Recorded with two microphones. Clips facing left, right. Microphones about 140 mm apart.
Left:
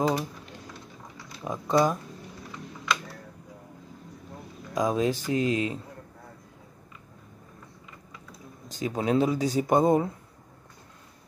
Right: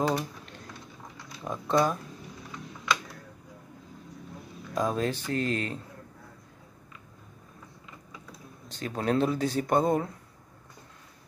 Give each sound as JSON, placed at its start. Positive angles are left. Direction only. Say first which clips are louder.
{"t": 0.0, "sound": "a sound", "louder": "left 2 dB", "side_deg": 0}
{"t": 2.5, "sound": "computer keyboard", "louder": "even", "side_deg": 0}
{"t": 4.7, "sound": "speech", "louder": "left 3 dB", "side_deg": 5}
{"t": 8.1, "sound": "typing", "louder": "left 1 dB", "side_deg": 0}
{"t": 8.9, "sound": "speech", "louder": "left 2 dB", "side_deg": 5}
{"t": 9.7, "sound": "speech", "louder": "left 4 dB", "side_deg": 15}